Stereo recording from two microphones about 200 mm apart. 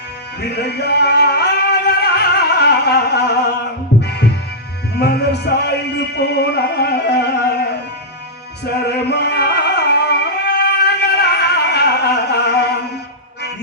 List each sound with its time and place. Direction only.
0.4 s music: 55° left (ahead or behind)
8.7 s music: 55° left (ahead or behind)